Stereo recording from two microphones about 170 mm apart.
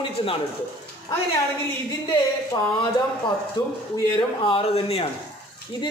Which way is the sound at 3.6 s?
25° left (ahead or behind).